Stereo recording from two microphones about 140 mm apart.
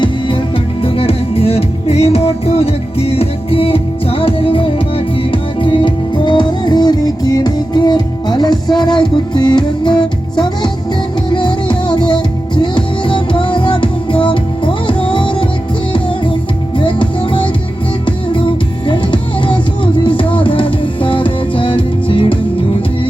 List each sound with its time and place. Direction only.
0.8 s music: 40° left (ahead or behind)
16.7 s music: 35° left (ahead or behind)
18.9 s music: 35° left (ahead or behind)